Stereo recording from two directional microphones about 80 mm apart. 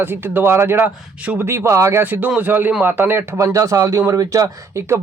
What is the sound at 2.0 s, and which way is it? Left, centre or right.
Speech, right.